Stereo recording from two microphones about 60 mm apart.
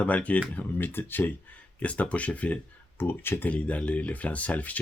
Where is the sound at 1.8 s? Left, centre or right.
Left.